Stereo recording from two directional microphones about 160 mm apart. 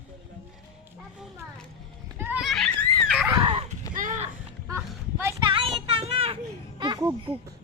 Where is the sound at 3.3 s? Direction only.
35° right (ahead or behind).